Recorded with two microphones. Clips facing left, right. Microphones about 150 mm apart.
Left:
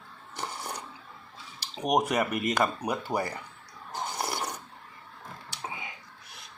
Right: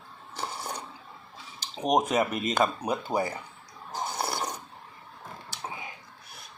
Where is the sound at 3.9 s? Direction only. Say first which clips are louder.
Right 1 dB; 10° right (ahead or behind).